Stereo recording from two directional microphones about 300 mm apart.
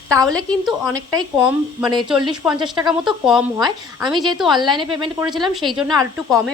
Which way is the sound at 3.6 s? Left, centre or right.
Centre.